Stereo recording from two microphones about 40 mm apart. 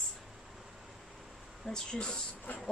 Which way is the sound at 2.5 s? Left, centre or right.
Left.